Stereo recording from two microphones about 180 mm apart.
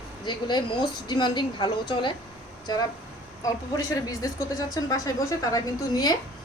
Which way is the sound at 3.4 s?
20° left (ahead or behind).